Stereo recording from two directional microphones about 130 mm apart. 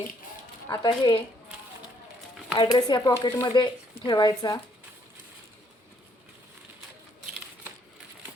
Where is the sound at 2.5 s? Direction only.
40° left (ahead or behind).